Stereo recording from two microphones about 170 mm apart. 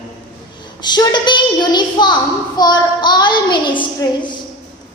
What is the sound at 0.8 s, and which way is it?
A woman's voice, 25° left (ahead or behind).